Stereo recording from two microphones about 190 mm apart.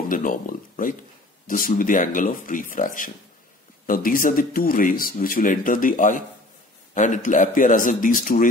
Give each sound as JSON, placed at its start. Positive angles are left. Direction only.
{"t": 0.1, "sound": "speech", "side_deg": 45}